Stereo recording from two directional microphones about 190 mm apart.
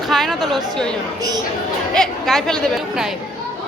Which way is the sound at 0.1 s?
Centre (ahead or behind).